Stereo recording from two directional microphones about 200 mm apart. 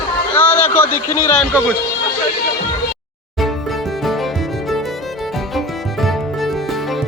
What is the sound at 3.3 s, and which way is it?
Music, centre (ahead or behind).